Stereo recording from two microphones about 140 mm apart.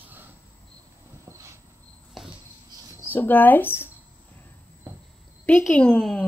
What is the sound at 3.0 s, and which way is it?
Speech, 15° left (ahead or behind).